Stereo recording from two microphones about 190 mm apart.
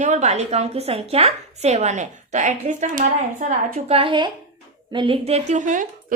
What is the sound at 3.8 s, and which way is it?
A woman's voice, 30° right (ahead or behind).